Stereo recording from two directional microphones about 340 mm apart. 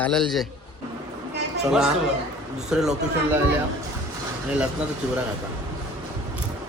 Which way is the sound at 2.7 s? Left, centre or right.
Centre.